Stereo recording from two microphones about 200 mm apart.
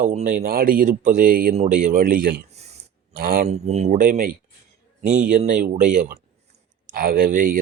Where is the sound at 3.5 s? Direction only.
35° right (ahead or behind).